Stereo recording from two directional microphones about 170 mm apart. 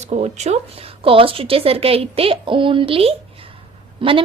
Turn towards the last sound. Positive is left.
turn(degrees=-30)  # may be behind; listen again after turning